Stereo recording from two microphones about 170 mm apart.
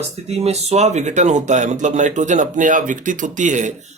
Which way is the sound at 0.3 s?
40° right (ahead or behind).